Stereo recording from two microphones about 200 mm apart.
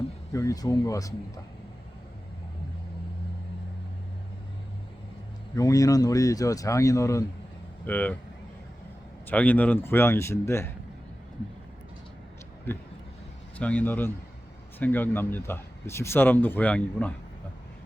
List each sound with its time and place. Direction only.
0.3 s speech: 15° left (ahead or behind)
5.5 s speech: 15° left (ahead or behind)
9.2 s speech: 10° left (ahead or behind)
13.6 s speech: 5° left (ahead or behind)